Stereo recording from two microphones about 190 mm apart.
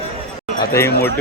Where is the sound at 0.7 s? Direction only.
15° left (ahead or behind).